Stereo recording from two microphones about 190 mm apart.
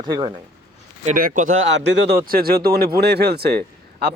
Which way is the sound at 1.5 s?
80° right.